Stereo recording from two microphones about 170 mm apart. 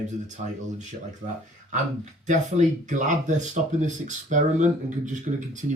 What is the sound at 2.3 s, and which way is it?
Speech, 45° right (ahead or behind).